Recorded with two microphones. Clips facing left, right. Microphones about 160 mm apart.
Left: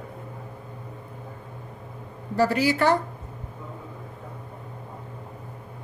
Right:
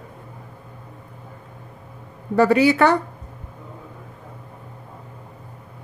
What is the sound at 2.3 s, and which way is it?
Speech, 65° right (ahead or behind).